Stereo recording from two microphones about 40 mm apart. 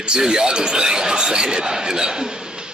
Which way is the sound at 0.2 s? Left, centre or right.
Centre.